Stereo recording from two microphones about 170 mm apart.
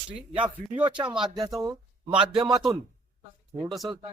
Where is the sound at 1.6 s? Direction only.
25° right (ahead or behind).